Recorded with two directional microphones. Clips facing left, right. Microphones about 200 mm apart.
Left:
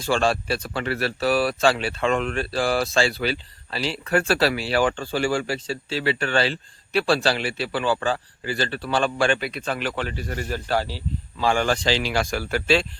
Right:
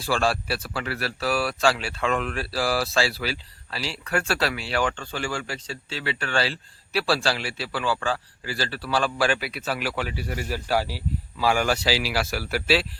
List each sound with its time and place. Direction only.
0.0 s speech: 5° right (ahead or behind)
4.7 s speech: 35° left (ahead or behind)
6.2 s speech: centre (ahead or behind)